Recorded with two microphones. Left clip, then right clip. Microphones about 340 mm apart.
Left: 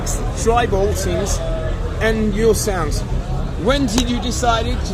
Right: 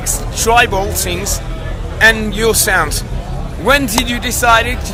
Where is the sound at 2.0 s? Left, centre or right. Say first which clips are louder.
Right 7 dB; right.